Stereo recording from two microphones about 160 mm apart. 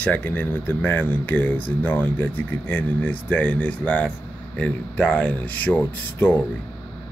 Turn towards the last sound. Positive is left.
turn(degrees=10)  # may be behind; listen again after turning